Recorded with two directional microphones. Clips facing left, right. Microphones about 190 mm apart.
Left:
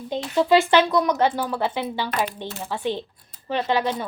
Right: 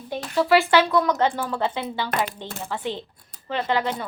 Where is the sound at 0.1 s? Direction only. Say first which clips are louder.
Left 1 dB; 20° left (ahead or behind).